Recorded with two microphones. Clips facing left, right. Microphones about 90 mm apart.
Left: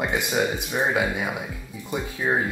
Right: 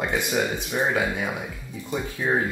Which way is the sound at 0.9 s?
15° left (ahead or behind).